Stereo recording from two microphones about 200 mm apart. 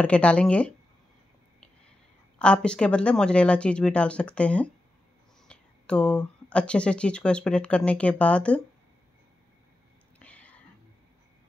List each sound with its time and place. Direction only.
0.0 s speech: 5° left (ahead or behind)
2.3 s speech: 5° left (ahead or behind)
10.1 s whispering: 5° left (ahead or behind)